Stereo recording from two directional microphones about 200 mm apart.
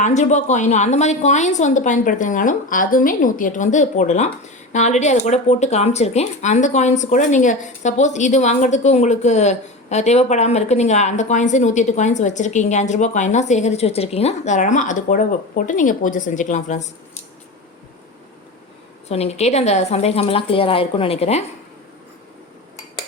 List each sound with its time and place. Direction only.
0.0 s speech: 35° left (ahead or behind)
19.0 s speech: 30° left (ahead or behind)